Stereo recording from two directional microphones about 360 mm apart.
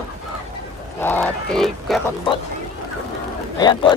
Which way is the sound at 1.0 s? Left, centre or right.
Centre.